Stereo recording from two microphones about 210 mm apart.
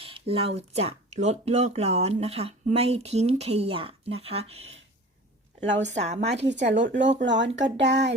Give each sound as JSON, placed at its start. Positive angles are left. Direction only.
{"t": 0.0, "sound": "speech", "side_deg": -25}
{"t": 5.8, "sound": "speech", "side_deg": -35}
{"t": 6.5, "sound": "speech", "side_deg": -55}